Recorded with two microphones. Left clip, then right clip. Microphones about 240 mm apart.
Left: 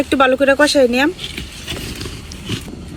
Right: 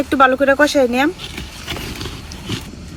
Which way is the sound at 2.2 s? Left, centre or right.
Centre.